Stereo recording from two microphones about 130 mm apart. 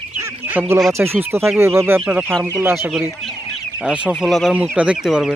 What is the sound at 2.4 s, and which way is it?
Speech, 20° right (ahead or behind).